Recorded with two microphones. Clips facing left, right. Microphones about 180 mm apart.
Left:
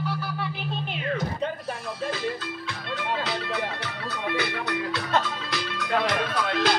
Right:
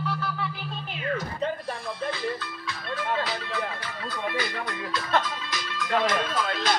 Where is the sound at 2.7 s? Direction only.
70° left (ahead or behind).